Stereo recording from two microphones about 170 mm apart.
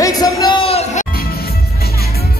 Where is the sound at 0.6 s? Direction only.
40° left (ahead or behind).